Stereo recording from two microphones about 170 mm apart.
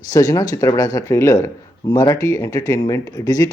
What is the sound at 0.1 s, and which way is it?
Speech, 20° left (ahead or behind).